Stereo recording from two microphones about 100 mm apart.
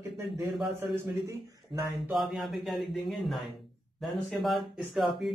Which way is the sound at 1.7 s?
55° right (ahead or behind).